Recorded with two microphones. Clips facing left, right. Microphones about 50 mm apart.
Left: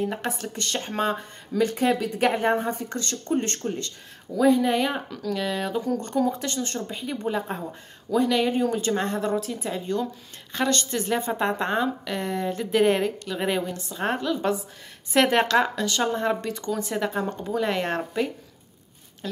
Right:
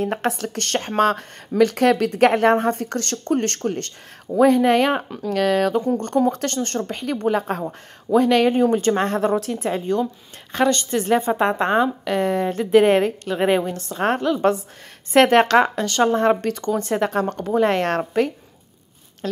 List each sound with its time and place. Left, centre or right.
0.0 s speech: right
4.9 s a woman's voice: right
5.3 s a woman's voice: right
13.9 s a woman's voice: right